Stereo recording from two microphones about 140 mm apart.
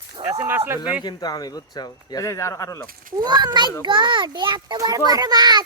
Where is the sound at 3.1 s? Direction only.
30° right (ahead or behind).